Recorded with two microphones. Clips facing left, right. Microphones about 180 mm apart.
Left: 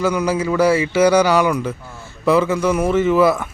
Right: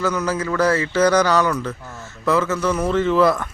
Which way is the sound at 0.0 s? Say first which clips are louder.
Left 3 dB; 10° left (ahead or behind).